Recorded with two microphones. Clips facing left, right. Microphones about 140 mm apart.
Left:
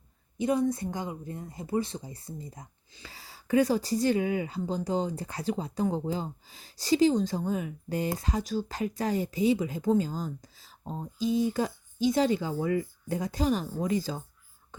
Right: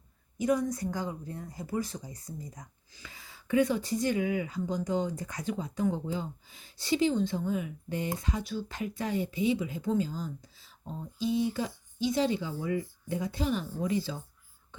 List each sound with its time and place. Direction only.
0.3 s speech: 25° left (ahead or behind); by 14.3 s 45° left (ahead or behind)